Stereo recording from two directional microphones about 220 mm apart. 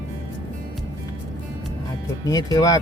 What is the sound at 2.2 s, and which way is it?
Speech, 15° left (ahead or behind).